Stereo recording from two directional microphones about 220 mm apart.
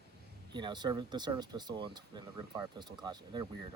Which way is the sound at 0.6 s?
20° right (ahead or behind).